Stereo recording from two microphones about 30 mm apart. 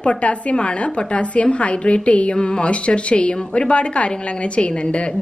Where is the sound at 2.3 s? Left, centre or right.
Left.